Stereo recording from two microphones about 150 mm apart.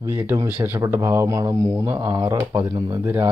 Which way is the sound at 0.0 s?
15° right (ahead or behind).